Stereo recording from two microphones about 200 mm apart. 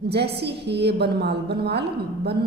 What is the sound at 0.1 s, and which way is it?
A man's voice, 55° right (ahead or behind).